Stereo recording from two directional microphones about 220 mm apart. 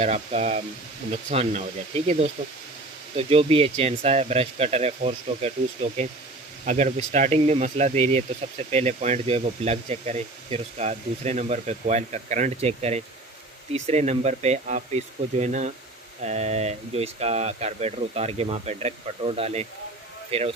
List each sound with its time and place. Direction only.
0.0 s speech: 30° right (ahead or behind)